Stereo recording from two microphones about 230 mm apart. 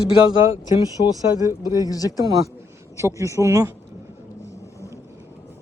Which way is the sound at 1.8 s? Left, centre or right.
Centre.